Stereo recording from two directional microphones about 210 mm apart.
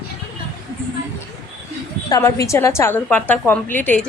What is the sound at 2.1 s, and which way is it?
A woman's voice, 15° left (ahead or behind).